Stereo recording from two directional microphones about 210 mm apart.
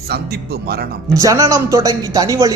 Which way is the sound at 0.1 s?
50° right (ahead or behind).